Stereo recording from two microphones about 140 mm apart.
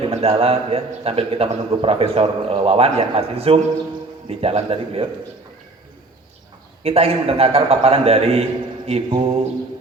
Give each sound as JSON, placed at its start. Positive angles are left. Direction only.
{"t": 0.1, "sound": "a man's voice", "side_deg": -45}
{"t": 6.8, "sound": "a man's voice", "side_deg": -45}